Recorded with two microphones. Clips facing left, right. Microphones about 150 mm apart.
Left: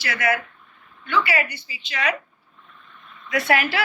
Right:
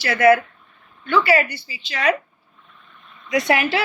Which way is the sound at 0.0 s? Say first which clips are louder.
Right 9 dB; 30° right (ahead or behind).